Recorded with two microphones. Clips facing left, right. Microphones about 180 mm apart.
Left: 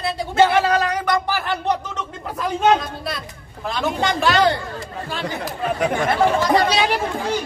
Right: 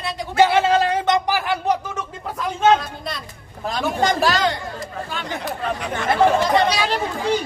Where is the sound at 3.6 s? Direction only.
40° right (ahead or behind).